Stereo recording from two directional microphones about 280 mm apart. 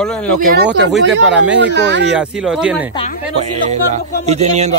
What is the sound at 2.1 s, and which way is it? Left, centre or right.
Speech, centre.